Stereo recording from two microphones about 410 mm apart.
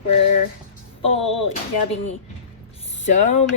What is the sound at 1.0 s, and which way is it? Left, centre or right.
Speech, centre.